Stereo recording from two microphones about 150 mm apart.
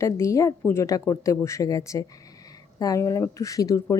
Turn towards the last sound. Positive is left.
turn(degrees=20)  # may be behind; listen again after turning